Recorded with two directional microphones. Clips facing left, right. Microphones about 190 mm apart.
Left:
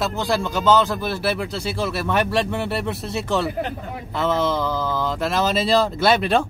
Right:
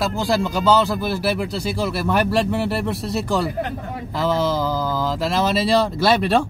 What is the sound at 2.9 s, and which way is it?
Speech, 35° right (ahead or behind).